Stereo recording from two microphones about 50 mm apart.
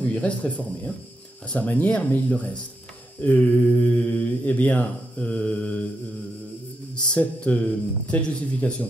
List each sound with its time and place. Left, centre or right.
0.1 s mantra: left
7.0 s mantra: left